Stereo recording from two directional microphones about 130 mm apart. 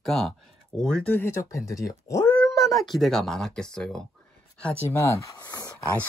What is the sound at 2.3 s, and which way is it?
Speech, 5° left (ahead or behind).